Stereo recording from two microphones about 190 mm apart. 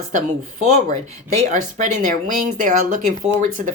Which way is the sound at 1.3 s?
40° right (ahead or behind).